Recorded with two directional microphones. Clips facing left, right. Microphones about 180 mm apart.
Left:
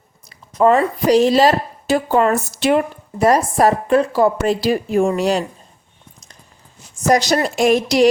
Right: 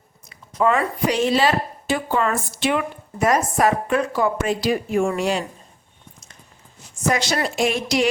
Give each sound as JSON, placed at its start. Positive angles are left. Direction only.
{"t": 0.3, "sound": "a woman's voice", "side_deg": 35}
{"t": 7.1, "sound": "a woman's voice", "side_deg": 40}